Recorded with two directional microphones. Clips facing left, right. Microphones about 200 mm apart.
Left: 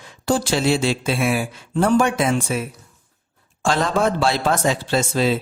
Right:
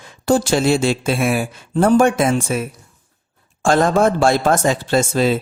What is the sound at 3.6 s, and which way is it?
Speech, 50° right (ahead or behind).